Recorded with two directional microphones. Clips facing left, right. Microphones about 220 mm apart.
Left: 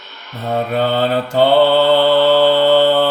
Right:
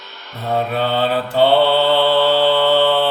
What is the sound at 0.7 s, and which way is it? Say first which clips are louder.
Mantra: left 5 dB; 40° left (ahead or behind).